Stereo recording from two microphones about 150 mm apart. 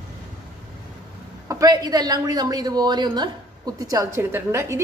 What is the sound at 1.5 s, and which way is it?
A woman's voice, 25° right (ahead or behind).